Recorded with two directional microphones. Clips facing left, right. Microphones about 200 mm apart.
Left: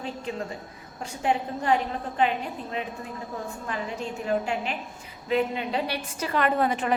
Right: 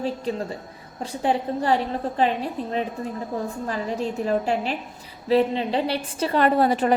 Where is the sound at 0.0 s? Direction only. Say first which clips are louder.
Right 6 dB; 35° right (ahead or behind).